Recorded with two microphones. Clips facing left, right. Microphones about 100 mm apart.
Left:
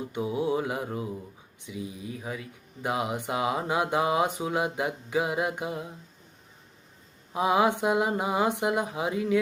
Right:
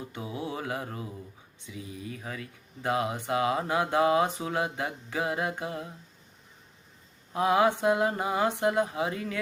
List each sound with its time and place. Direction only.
0.1 s mantra: 20° left (ahead or behind)
1.6 s speech: 15° left (ahead or behind)
7.3 s speech: 15° left (ahead or behind)